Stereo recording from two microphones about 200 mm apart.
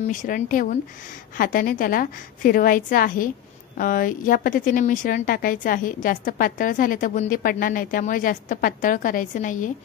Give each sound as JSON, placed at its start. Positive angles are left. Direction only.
{"t": 0.0, "sound": "a woman's voice", "side_deg": 40}